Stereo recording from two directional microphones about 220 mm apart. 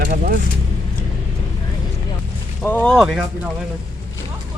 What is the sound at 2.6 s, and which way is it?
Speech, 5° left (ahead or behind).